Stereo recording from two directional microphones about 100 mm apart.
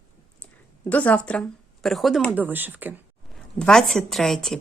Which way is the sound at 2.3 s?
20° right (ahead or behind).